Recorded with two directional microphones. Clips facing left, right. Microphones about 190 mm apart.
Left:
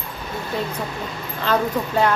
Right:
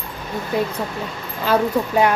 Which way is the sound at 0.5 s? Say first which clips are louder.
Right 5 dB; 15° right (ahead or behind).